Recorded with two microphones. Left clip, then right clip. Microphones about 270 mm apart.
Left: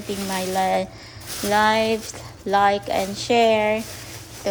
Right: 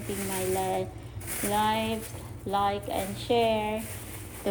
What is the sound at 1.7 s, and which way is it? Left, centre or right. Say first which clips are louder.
Speech: left 9 dB; left.